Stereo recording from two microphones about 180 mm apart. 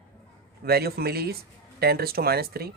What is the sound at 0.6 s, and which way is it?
Speech, 60° right (ahead or behind).